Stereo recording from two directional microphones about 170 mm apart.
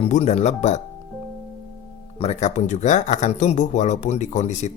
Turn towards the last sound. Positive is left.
turn(degrees=45)  # may be behind; listen again after turning